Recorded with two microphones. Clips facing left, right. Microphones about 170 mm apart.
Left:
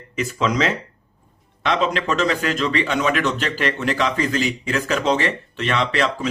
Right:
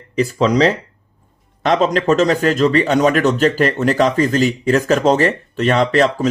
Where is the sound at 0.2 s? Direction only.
35° right (ahead or behind).